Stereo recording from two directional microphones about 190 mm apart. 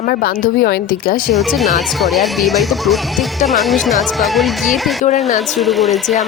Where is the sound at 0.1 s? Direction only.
50° left (ahead or behind).